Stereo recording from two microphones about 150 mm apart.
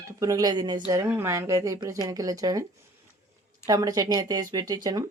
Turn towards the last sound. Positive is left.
turn(degrees=-25)  # may be behind; listen again after turning